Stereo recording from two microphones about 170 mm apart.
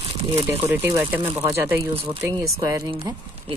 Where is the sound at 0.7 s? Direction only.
10° right (ahead or behind).